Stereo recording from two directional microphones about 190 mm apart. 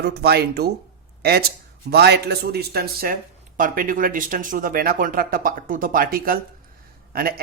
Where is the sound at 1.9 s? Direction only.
60° right (ahead or behind).